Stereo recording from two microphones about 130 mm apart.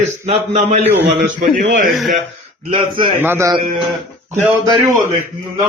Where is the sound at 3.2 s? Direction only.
20° right (ahead or behind).